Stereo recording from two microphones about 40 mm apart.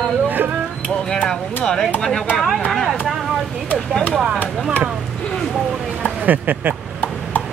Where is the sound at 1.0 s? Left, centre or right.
Centre.